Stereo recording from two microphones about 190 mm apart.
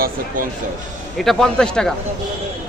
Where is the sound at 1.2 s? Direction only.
Centre (ahead or behind).